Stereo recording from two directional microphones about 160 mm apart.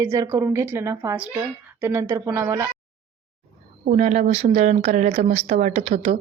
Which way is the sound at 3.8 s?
45° right (ahead or behind).